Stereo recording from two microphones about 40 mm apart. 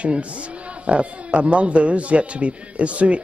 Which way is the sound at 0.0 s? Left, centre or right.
Right.